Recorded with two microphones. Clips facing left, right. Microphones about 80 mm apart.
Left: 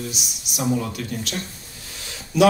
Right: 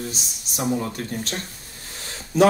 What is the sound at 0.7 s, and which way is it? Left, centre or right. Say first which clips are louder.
Speech: left 1 dB; right.